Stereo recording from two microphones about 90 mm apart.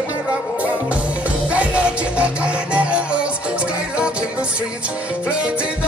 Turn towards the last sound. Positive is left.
turn(degrees=-15)  # may be behind; listen again after turning